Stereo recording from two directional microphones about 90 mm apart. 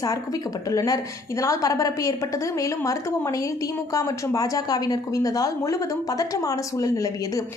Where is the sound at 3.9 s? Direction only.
40° left (ahead or behind).